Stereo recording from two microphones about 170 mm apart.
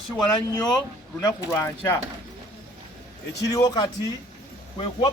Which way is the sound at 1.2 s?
20° left (ahead or behind).